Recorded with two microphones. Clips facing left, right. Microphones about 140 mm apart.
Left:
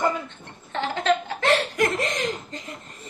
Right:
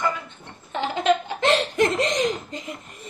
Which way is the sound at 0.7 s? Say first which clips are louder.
Right 2 dB; 15° right (ahead or behind).